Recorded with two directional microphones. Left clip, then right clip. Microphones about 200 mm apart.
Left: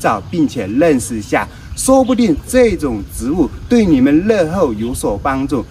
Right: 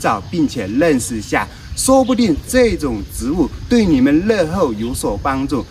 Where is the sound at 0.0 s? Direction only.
Centre (ahead or behind).